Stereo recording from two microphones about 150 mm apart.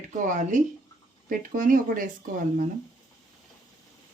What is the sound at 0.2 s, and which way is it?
Speech, 55° right (ahead or behind).